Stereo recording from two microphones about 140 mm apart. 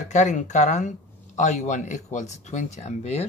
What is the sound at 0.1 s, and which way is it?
Speech, 60° left (ahead or behind).